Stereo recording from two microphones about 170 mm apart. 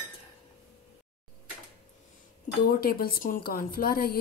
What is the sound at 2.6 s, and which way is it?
Speech, 60° left (ahead or behind).